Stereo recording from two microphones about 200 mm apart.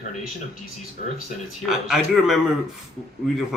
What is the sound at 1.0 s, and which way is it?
Speech, 40° left (ahead or behind).